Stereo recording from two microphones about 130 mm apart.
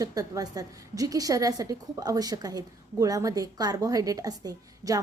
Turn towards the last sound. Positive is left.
turn(degrees=-30)  # may be behind; listen again after turning